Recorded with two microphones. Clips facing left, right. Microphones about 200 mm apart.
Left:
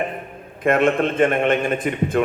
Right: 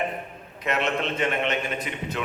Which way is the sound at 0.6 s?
50° left (ahead or behind).